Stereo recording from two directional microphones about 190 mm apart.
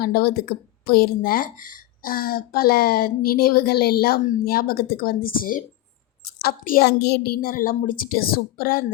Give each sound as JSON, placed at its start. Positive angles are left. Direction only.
{"t": 0.0, "sound": "speech", "side_deg": 50}